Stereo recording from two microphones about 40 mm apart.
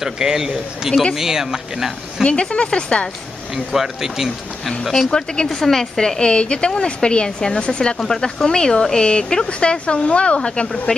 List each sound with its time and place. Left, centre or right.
0.0 s speech: centre
2.5 s a woman's voice: left
3.5 s speech: centre
5.1 s a woman's voice: centre